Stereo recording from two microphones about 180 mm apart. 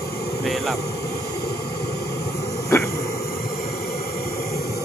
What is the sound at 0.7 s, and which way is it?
Vehicle, 65° left (ahead or behind).